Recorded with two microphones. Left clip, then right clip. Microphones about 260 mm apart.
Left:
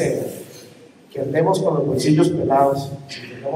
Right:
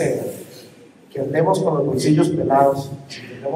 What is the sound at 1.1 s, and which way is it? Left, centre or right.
A man's voice, right.